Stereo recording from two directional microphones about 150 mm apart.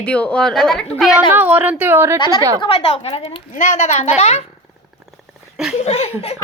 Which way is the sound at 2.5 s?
35° left (ahead or behind).